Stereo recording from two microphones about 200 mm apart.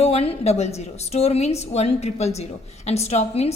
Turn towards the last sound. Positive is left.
turn(degrees=30)  # may be behind; listen again after turning